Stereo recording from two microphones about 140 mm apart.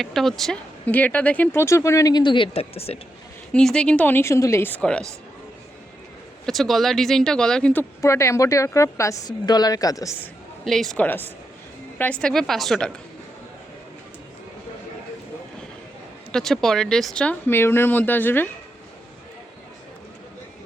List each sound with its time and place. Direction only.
0.0 s speech: centre (ahead or behind); by 3.0 s 45° left (ahead or behind)
3.5 s speech: 5° left (ahead or behind)
6.4 s speech: centre (ahead or behind)
8.0 s speech: 20° left (ahead or behind)
10.7 s speech: centre (ahead or behind)
11.0 s speech: 15° left (ahead or behind)
12.2 s speech: centre (ahead or behind)
16.3 s speech: 5° left (ahead or behind)